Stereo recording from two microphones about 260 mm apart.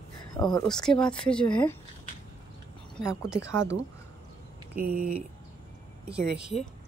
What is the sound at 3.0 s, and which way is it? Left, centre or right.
Speech, centre.